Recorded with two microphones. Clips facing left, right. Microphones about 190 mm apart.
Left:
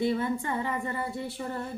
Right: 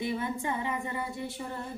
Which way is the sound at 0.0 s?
15° right (ahead or behind).